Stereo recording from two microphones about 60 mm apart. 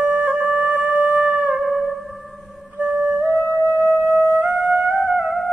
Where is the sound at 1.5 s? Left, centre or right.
Centre.